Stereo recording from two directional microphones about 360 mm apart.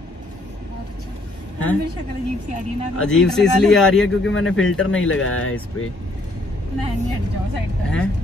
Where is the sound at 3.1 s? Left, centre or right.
Centre.